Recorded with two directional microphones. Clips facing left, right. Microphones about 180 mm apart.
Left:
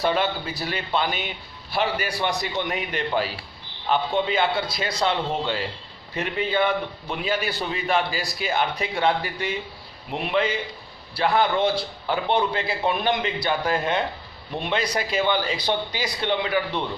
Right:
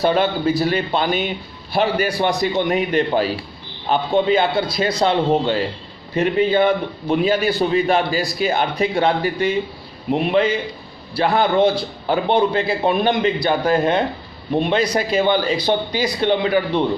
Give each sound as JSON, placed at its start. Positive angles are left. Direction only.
{"t": 0.0, "sound": "a man's voice", "side_deg": -40}